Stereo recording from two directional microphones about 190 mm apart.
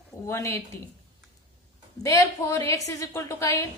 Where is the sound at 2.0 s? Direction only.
15° left (ahead or behind).